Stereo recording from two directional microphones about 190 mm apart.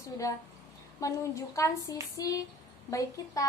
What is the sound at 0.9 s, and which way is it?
A woman's voice, 15° left (ahead or behind).